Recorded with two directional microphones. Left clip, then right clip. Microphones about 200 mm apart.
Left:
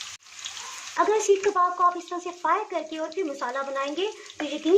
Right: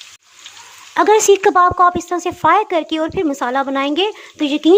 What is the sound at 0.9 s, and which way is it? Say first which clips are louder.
Speech: right 10 dB; 50° right (ahead or behind).